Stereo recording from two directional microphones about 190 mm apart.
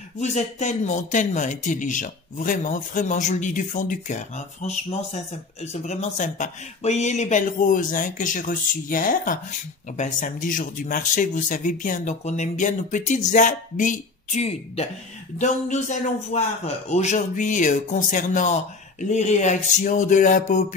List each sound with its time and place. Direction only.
0.2 s speech: 35° left (ahead or behind)